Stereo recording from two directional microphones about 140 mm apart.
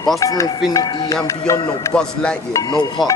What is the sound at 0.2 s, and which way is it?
Speech, 25° left (ahead or behind).